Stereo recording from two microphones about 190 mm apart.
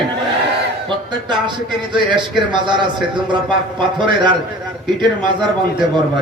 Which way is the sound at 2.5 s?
25° right (ahead or behind).